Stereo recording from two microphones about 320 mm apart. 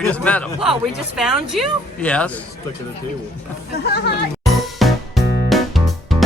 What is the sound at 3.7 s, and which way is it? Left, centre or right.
Speech, left.